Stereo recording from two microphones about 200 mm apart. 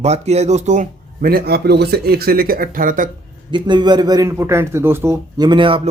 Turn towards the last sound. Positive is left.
turn(degrees=-25)  # may be behind; listen again after turning